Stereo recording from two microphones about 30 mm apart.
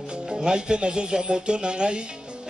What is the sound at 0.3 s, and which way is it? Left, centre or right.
A man's voice, right.